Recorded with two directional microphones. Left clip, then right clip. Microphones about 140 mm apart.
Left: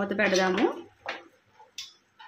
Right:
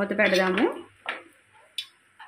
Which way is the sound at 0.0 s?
20° right (ahead or behind).